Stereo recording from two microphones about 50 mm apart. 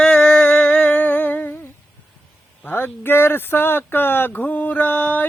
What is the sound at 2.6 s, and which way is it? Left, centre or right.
Speech, left.